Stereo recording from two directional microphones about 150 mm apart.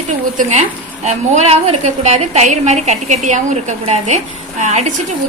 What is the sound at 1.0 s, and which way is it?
A woman's voice, 50° right (ahead or behind).